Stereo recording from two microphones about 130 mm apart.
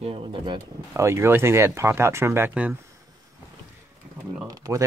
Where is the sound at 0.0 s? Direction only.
50° right (ahead or behind).